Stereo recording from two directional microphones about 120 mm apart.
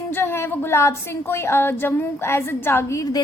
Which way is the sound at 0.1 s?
20° left (ahead or behind).